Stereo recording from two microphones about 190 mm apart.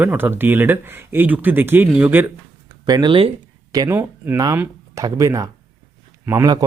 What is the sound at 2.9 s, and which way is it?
Speech, 25° right (ahead or behind).